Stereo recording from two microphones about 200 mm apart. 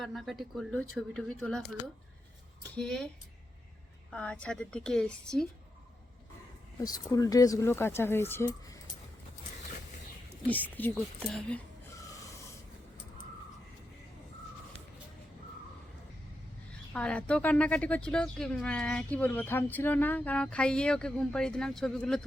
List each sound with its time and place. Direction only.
0.0 s speech: centre (ahead or behind)
2.7 s speech: 5° left (ahead or behind)
4.1 s speech: 5° left (ahead or behind)
6.8 s speech: 20° left (ahead or behind)
10.4 s speech: 10° left (ahead or behind)
11.9 s a sound: 15° left (ahead or behind)
16.9 s speech: 5° left (ahead or behind)